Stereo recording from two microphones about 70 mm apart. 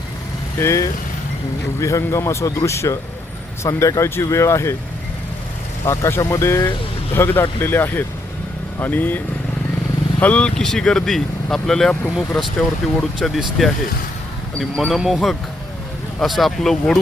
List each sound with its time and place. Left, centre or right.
0.6 s speech: left
5.8 s speech: left; by 17.0 s centre